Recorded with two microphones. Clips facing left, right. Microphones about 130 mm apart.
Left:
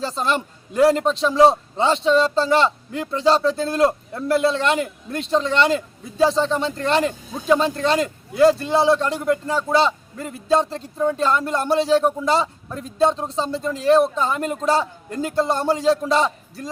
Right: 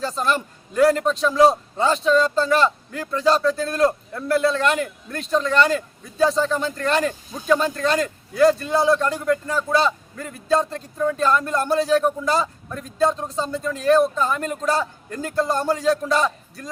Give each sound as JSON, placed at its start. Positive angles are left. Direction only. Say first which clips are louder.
{"t": 0.0, "sound": "a man's voice", "louder": "even", "side_deg": 25}